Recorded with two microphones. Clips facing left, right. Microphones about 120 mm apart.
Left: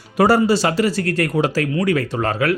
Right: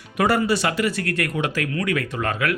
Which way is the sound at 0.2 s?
30° left (ahead or behind).